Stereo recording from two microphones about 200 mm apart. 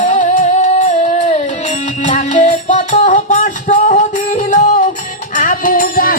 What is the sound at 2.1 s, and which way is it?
Music, 40° left (ahead or behind).